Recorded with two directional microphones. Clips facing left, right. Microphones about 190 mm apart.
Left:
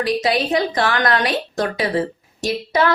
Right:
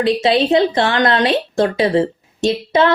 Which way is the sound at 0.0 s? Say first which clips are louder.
Right 5 dB; 25° right (ahead or behind).